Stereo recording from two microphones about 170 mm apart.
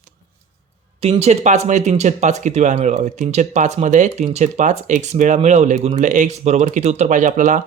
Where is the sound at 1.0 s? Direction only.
35° right (ahead or behind).